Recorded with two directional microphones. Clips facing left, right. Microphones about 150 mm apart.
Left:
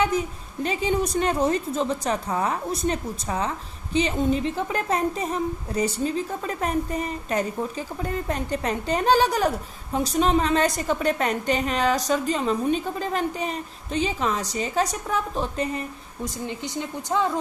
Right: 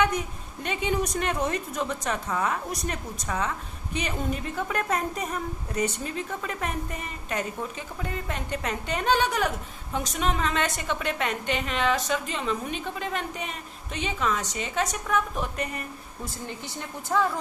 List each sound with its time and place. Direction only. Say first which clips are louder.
0.6 s a woman's voice: left 4 dB; 35° left (ahead or behind)
16.2 s speech: left 6 dB; 15° left (ahead or behind)